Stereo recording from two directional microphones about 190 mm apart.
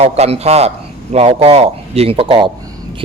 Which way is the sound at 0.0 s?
35° right (ahead or behind).